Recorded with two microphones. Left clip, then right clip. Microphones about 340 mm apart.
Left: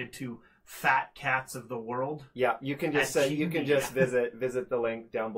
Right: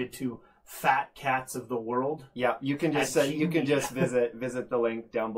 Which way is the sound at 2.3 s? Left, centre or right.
Left.